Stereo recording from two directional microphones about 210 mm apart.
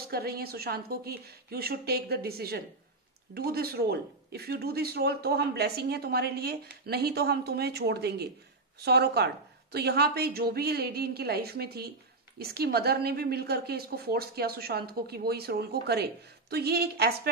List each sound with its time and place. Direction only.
0.1 s a woman's voice: 45° right (ahead or behind)